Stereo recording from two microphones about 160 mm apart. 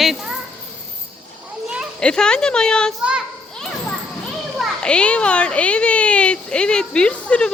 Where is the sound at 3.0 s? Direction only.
Centre (ahead or behind).